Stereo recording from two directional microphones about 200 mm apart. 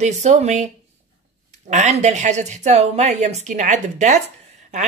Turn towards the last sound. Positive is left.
turn(degrees=-35)  # may be behind; listen again after turning